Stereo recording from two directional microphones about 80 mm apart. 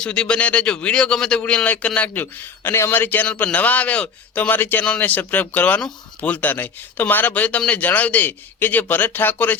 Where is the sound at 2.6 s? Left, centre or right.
Left.